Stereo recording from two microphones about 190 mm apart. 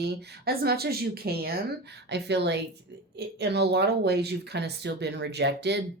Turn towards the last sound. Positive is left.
turn(degrees=-60)  # may be behind; listen again after turning